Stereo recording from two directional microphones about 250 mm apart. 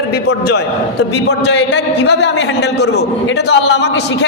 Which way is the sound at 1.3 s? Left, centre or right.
Left.